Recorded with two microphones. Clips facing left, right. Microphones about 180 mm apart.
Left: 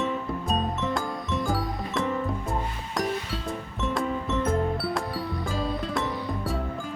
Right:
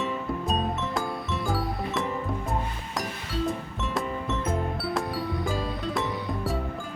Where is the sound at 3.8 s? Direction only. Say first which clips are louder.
Left 2 dB; centre (ahead or behind).